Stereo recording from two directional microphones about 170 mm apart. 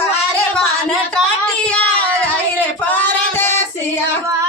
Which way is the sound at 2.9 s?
10° left (ahead or behind).